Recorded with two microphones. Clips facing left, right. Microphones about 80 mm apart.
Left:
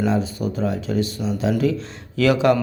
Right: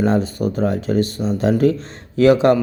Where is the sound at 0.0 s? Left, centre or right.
Right.